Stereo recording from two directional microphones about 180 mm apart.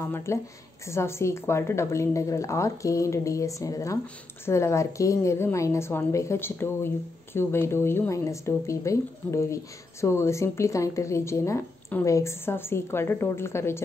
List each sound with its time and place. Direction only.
0.0 s speech: 15° left (ahead or behind)